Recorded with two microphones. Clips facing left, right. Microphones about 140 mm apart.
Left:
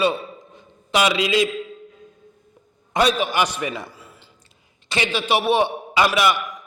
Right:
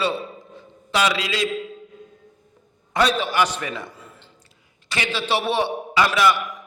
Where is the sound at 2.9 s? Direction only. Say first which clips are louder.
Left 1 dB; 15° left (ahead or behind).